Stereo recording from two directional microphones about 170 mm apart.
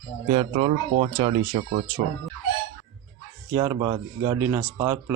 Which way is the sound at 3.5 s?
20° right (ahead or behind).